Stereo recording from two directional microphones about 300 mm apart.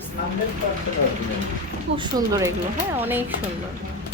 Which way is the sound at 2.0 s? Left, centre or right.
Centre.